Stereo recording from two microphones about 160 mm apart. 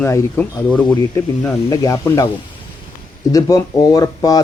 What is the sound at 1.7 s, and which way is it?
Speech, 20° left (ahead or behind).